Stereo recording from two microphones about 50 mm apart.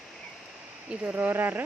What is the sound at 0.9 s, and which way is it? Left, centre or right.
Speech, right.